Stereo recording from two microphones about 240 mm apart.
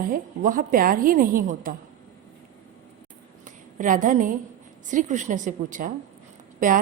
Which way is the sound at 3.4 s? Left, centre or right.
Right.